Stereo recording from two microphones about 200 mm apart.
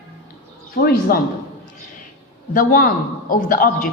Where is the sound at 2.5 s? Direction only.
45° left (ahead or behind).